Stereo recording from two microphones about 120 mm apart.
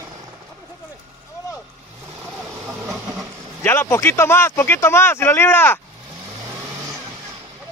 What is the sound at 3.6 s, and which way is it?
Speech, 20° left (ahead or behind).